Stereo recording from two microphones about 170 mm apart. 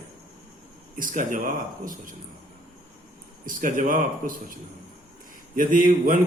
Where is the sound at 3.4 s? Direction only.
55° right (ahead or behind).